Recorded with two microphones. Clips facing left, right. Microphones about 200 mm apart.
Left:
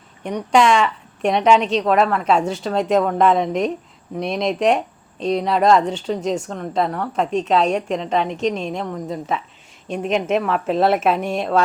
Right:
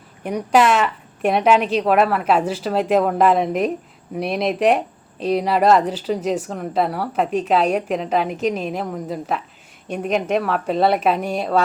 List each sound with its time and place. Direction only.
0.2 s speech: 5° right (ahead or behind)